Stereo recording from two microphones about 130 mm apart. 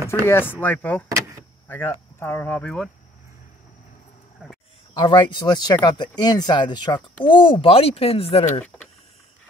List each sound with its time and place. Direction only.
0.3 s speech: 15° left (ahead or behind)
4.9 s speech: 35° left (ahead or behind)